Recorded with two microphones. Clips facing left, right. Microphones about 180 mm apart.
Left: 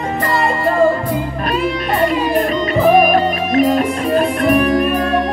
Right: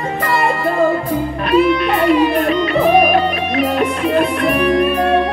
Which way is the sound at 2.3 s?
45° left (ahead or behind).